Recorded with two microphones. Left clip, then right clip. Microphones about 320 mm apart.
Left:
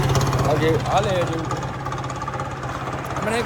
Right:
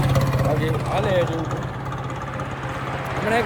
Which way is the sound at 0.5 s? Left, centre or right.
Centre.